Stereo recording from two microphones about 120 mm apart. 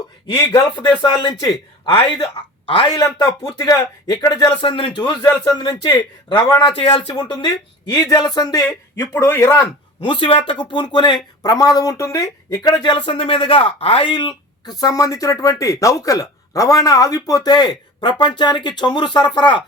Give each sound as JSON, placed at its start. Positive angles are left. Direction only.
{"t": 0.5, "sound": "a man's voice", "side_deg": 30}
{"t": 3.2, "sound": "speech", "side_deg": 30}
{"t": 6.7, "sound": "speech", "side_deg": 50}
{"t": 7.2, "sound": "speech", "side_deg": 35}
{"t": 10.0, "sound": "speech", "side_deg": 45}